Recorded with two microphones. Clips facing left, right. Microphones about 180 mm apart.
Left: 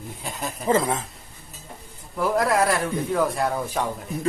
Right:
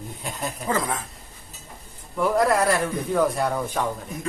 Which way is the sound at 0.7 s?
25° left (ahead or behind).